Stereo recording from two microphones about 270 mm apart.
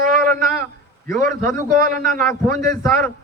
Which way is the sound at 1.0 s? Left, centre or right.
Right.